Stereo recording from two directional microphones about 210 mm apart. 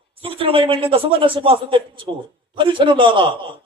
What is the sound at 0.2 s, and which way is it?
A man's voice, 25° right (ahead or behind).